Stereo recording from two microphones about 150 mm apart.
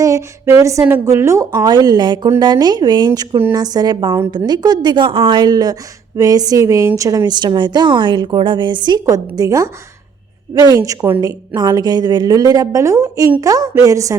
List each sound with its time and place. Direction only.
0.0 s a woman's voice: 20° right (ahead or behind)
3.1 s a woman's voice: 15° right (ahead or behind)
10.8 s a woman's voice: 20° right (ahead or behind)